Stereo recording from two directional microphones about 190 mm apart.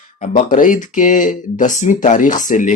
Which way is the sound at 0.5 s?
45° left (ahead or behind).